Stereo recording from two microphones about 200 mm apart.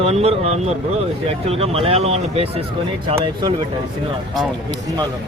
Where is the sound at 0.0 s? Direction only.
30° right (ahead or behind).